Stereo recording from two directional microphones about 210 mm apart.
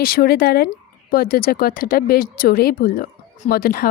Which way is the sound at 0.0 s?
45° left (ahead or behind).